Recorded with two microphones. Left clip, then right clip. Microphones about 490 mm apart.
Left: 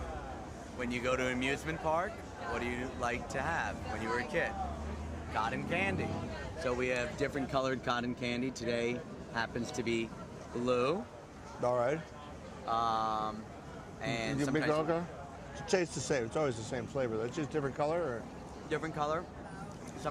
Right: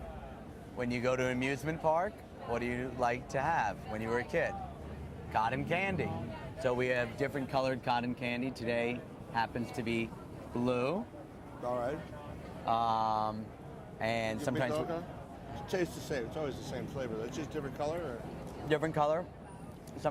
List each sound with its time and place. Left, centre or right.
0.8 s speech: right
6.7 s speech: right; by 10.9 s centre
11.6 s speech: left
12.6 s speech: right
14.7 s speech: left
18.7 s speech: right